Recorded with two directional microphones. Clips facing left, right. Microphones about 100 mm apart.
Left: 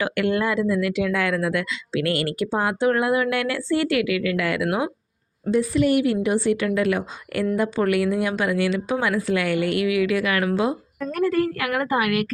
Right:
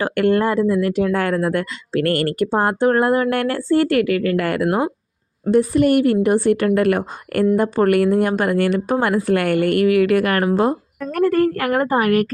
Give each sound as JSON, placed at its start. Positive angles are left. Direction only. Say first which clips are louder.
{"t": 0.0, "sound": "speech", "louder": "right 5 dB", "side_deg": -45}
{"t": 5.5, "sound": "speech", "louder": "right 5 dB", "side_deg": -55}